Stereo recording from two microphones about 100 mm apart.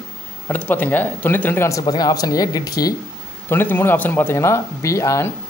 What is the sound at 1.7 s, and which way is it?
Speech, 40° left (ahead or behind).